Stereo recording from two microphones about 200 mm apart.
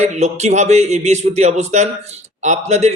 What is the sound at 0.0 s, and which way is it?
Speech, 35° right (ahead or behind).